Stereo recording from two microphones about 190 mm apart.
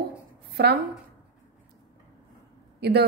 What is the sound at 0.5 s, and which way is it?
Speech, 60° right (ahead or behind).